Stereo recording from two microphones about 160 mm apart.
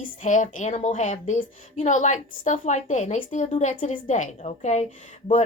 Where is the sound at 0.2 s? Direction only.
50° left (ahead or behind).